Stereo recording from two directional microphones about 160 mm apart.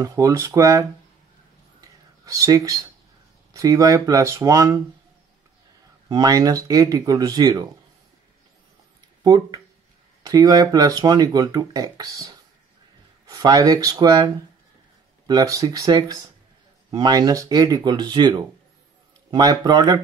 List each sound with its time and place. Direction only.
0.0 s speech: 20° right (ahead or behind)
1.8 s whispering: 20° right (ahead or behind)
3.5 s speech: 20° right (ahead or behind)
6.0 s speech: 25° right (ahead or behind)
9.2 s speech: 25° right (ahead or behind)